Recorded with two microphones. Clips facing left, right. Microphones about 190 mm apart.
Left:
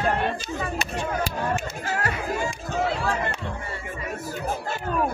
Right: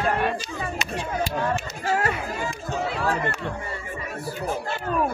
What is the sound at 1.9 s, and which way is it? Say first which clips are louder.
Speech: right 5 dB; 25° right (ahead or behind).